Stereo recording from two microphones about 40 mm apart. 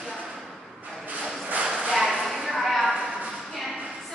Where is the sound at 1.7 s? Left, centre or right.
Centre.